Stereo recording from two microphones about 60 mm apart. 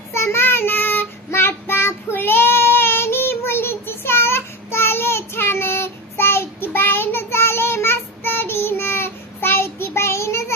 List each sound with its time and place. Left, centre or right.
0.1 s child singing: left